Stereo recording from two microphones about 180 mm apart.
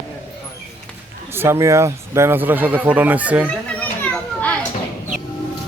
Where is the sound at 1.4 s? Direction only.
15° right (ahead or behind).